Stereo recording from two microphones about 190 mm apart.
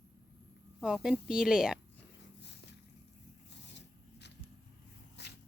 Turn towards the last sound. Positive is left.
turn(degrees=60)  # may be behind; listen again after turning